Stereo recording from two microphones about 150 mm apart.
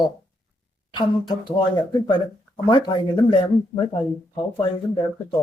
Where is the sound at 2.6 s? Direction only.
30° left (ahead or behind).